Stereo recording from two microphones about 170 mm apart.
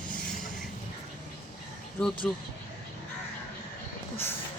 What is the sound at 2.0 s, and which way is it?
Speech, 5° left (ahead or behind).